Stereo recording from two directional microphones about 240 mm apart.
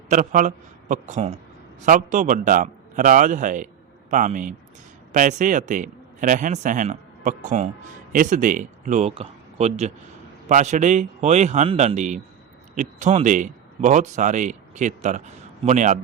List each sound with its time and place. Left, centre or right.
0.1 s a man's voice: right